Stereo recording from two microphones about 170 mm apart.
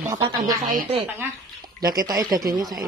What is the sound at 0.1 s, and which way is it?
Speech, 25° right (ahead or behind).